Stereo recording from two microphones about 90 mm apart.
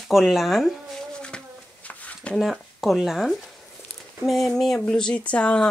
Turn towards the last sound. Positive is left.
turn(degrees=15)  # may be behind; listen again after turning